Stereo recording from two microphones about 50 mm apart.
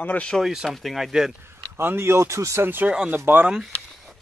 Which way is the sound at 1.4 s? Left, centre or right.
Right.